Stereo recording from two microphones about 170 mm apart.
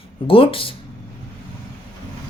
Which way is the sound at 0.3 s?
30° left (ahead or behind).